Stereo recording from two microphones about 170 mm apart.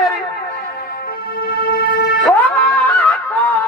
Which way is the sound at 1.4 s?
60° left (ahead or behind).